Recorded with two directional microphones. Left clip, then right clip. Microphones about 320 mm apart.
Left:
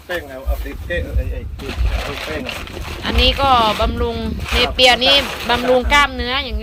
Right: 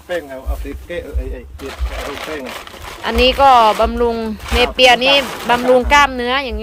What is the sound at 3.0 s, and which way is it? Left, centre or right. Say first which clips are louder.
Speech: right 5 dB; centre.